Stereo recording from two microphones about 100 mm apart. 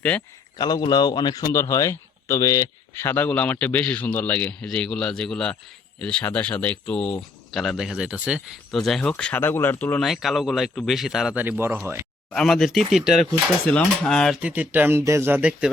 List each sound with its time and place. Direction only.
0.5 s a man's voice: 45° left (ahead or behind); by 8.4 s 10° right (ahead or behind)
8.7 s a man's voice: 5° left (ahead or behind)
9.4 s speech: 20° left (ahead or behind)
10.0 s speech: centre (ahead or behind)
11.3 s speech: 20° right (ahead or behind)
12.3 s speech: 5° left (ahead or behind)
13.7 s a man's voice: 10° left (ahead or behind)
14.4 s speech: 15° right (ahead or behind)
15.4 s speech: 10° right (ahead or behind)